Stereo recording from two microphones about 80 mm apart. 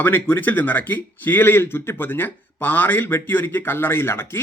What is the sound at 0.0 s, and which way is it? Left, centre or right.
A man's voice, left.